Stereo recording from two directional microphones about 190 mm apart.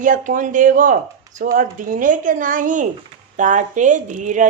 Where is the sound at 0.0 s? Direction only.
45° right (ahead or behind).